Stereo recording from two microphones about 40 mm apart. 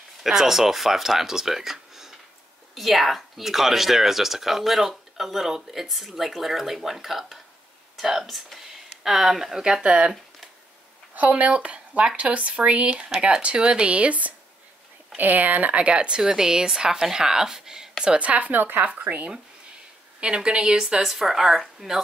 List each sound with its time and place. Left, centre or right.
0.2 s a woman's voice: centre
9.7 s speech: right
11.1 s speech: right
16.2 s a woman's voice: centre
18.0 s speech: right
18.5 s speech: right
20.2 s speech: right
20.7 s a woman's voice: centre